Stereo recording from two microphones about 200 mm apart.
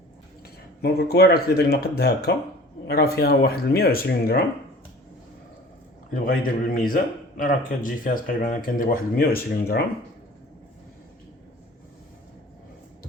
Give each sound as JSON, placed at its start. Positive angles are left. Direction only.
{"t": 0.8, "sound": "a man's voice", "side_deg": 50}
{"t": 6.2, "sound": "a man's voice", "side_deg": 45}